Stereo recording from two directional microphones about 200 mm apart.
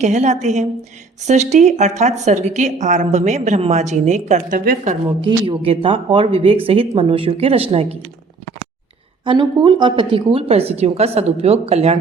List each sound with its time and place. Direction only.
0.0 s a woman's voice: 35° right (ahead or behind)
5.2 s speech: 25° right (ahead or behind)
9.2 s a woman's voice: 25° right (ahead or behind)